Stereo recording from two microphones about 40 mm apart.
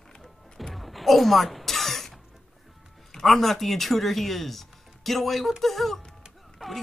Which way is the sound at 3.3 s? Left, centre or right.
Centre.